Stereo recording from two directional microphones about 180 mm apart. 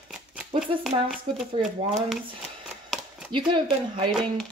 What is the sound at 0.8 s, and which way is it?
Speech, centre (ahead or behind).